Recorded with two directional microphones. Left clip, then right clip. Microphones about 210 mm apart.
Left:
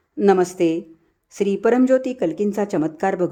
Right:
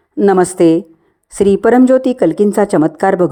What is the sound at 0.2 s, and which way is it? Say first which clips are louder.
A woman's voice: right 7 dB; 20° right (ahead or behind).